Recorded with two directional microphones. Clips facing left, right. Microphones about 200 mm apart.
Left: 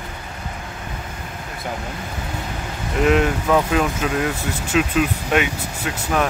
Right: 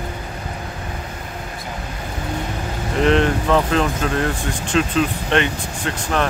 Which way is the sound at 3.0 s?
5° left (ahead or behind).